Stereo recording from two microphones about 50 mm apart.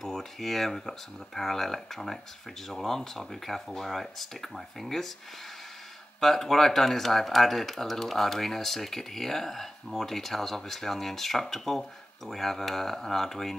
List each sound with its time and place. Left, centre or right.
0.0 s speech: centre
6.2 s speech: centre